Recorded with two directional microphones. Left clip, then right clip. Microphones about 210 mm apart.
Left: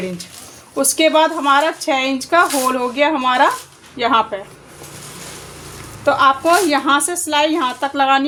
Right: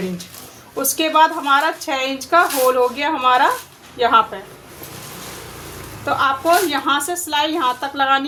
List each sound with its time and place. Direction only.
0.9 s speech: 40° left (ahead or behind)
6.1 s speech: 40° left (ahead or behind)